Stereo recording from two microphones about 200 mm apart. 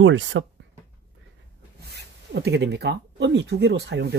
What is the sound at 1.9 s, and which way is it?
Speech, 55° right (ahead or behind).